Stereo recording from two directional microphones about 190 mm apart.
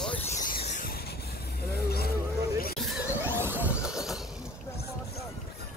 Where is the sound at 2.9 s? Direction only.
10° right (ahead or behind).